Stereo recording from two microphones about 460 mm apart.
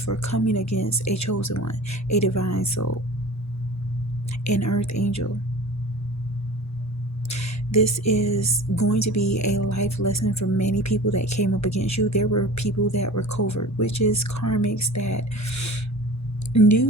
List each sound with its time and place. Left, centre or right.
0.0 s speech: left
4.4 s speech: left
7.3 s a woman's voice: left